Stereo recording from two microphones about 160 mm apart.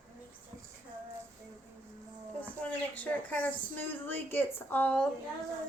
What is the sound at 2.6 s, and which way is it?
A woman's voice, 10° left (ahead or behind).